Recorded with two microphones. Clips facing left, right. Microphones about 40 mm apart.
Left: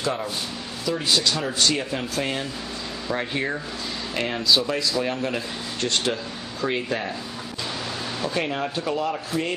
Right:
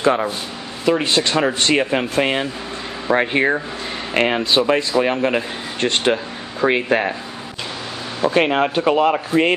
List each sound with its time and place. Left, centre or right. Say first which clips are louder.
0.0 s a man's voice: right 9 dB; right
8.4 s speech: right 11 dB; right